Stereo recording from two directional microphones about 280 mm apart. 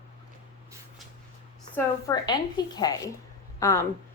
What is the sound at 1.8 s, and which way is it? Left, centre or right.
A woman's voice, centre.